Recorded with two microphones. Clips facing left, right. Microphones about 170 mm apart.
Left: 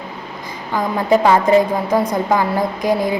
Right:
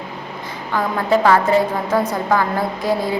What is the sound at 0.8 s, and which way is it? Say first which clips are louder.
Speech: left 2 dB; 15° left (ahead or behind).